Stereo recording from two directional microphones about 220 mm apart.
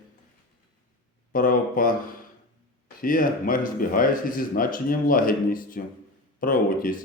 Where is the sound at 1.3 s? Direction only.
40° left (ahead or behind).